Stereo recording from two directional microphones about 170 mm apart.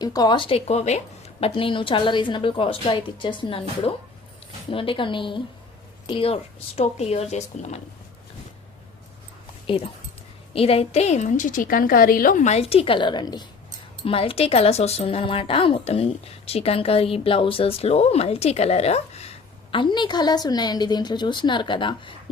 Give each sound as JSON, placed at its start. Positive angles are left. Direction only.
{"t": 0.0, "sound": "speech", "side_deg": 20}
{"t": 9.6, "sound": "speech", "side_deg": 35}
{"t": 19.7, "sound": "speech", "side_deg": 25}